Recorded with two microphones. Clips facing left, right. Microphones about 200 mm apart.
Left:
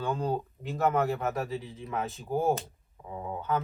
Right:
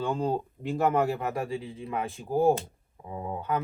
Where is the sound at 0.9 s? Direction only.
15° right (ahead or behind).